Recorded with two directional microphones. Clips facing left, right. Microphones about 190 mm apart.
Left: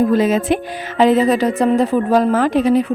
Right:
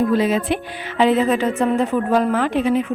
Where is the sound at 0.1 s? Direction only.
45° left (ahead or behind).